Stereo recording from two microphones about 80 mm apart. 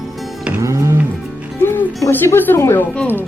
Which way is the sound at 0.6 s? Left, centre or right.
Right.